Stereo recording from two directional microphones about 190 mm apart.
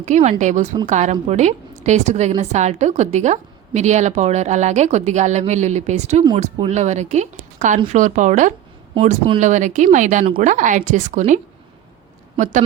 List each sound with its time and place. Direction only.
0.0 s a woman's voice: 40° right (ahead or behind)
9.0 s a woman's voice: 30° right (ahead or behind)
12.4 s a woman's voice: 40° right (ahead or behind)